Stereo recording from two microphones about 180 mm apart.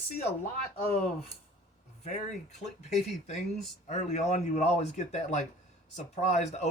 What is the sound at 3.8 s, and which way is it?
Speech, 40° left (ahead or behind).